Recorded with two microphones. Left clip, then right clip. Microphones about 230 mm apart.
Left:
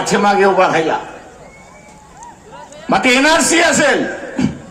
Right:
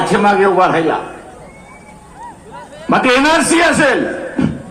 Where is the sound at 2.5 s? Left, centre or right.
Right.